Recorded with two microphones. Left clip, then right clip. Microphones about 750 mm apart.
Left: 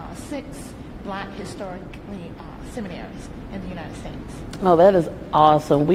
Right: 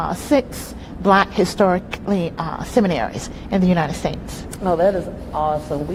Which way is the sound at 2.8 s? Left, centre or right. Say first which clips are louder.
Right 17 dB; right.